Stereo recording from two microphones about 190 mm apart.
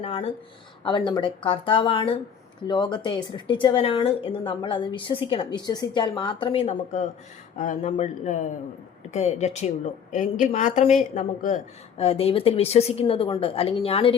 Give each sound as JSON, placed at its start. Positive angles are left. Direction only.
{"t": 0.0, "sound": "speech", "side_deg": 30}